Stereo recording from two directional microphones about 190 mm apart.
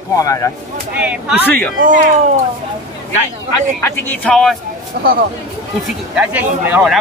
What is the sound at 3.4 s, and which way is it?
Speech, 10° left (ahead or behind).